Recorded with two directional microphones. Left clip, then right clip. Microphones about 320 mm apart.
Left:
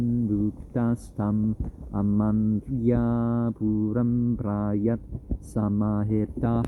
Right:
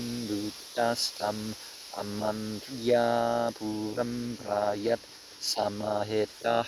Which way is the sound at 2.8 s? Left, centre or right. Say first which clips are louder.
Right 3 dB; right.